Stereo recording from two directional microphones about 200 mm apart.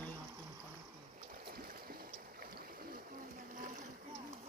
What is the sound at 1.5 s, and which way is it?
Boat, 50° right (ahead or behind).